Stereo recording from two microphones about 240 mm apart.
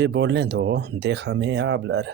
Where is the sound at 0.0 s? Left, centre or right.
Right.